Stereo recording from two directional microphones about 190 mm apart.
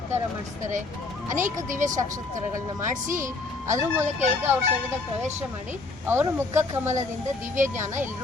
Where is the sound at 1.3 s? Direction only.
40° right (ahead or behind).